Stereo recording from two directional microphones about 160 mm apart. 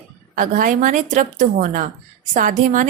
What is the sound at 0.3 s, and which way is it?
A woman's voice, 55° right (ahead or behind).